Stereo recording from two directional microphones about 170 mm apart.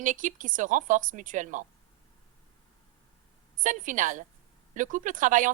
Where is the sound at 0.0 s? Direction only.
50° right (ahead or behind).